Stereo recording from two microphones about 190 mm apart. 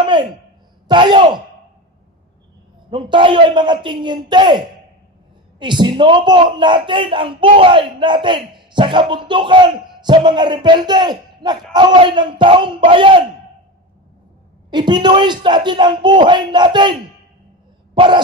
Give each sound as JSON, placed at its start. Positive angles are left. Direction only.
{"t": 0.0, "sound": "a sound", "side_deg": -25}
{"t": 0.8, "sound": "speech", "side_deg": -25}
{"t": 2.9, "sound": "speech", "side_deg": -25}
{"t": 14.7, "sound": "speech", "side_deg": -25}
{"t": 17.9, "sound": "cough", "side_deg": -25}